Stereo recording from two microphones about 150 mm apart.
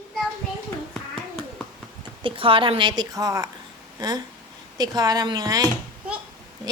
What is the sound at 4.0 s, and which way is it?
Speech, 25° right (ahead or behind).